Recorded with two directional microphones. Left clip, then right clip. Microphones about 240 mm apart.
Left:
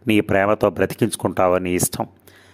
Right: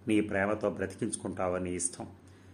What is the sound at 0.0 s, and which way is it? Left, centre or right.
Speech, left.